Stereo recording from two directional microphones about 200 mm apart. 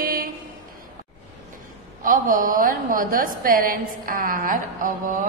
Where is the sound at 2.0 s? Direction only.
45° right (ahead or behind).